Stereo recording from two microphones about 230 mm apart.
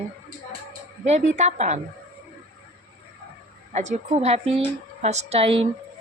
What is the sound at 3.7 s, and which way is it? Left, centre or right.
A woman's voice, right.